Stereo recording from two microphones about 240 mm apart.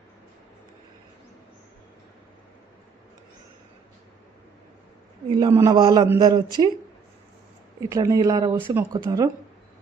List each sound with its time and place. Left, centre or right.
5.3 s speech: centre
7.8 s speech: centre